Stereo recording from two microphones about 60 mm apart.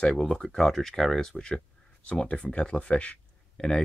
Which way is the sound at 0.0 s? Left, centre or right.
Centre.